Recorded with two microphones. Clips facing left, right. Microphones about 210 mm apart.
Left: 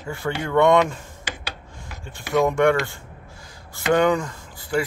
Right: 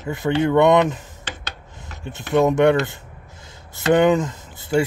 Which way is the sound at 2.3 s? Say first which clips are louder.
Right 3 dB; 20° right (ahead or behind).